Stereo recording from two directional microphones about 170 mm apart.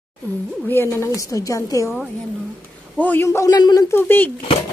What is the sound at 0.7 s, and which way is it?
A woman's voice, 15° left (ahead or behind).